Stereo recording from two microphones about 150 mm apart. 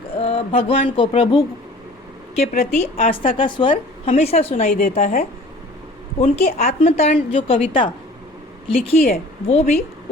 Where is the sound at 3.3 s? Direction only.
35° left (ahead or behind).